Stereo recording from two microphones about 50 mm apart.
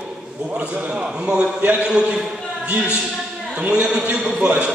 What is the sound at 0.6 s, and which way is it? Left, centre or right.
Speech, right.